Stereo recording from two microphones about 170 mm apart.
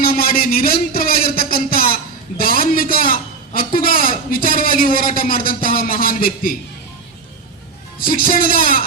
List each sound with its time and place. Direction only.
0.0 s a sound: 60° left (ahead or behind)
2.4 s a man's voice: 60° left (ahead or behind)
8.0 s speech: 55° left (ahead or behind)